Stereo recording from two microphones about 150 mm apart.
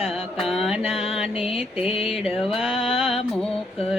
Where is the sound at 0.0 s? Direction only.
Centre (ahead or behind).